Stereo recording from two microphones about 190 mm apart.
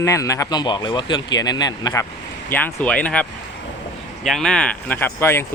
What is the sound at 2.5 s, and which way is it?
Speech, 10° left (ahead or behind).